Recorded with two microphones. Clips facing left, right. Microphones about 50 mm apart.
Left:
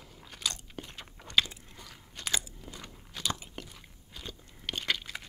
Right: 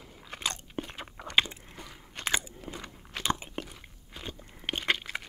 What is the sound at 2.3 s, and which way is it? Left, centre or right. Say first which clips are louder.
Crunch: right 4 dB; right.